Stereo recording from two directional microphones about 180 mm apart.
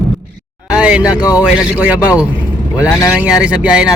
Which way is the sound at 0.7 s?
5° right (ahead or behind).